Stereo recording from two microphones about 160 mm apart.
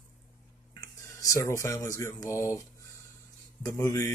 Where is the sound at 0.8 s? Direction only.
20° left (ahead or behind).